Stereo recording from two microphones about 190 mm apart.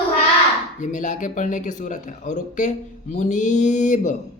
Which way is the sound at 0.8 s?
40° left (ahead or behind).